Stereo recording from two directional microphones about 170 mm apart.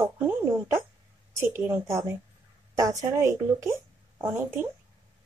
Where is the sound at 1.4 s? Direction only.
15° right (ahead or behind).